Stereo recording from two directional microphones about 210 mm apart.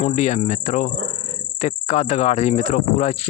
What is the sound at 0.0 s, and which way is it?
Speech, 35° left (ahead or behind).